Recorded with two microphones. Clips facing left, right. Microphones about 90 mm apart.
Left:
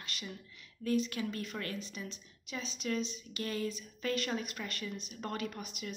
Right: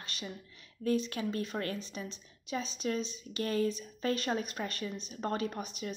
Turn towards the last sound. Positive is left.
turn(degrees=-35)  # may be behind; listen again after turning